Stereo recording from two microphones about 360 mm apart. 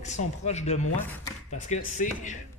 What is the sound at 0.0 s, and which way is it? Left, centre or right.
Speech, centre.